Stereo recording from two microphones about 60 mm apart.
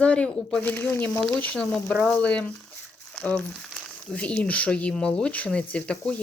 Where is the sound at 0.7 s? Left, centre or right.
Left.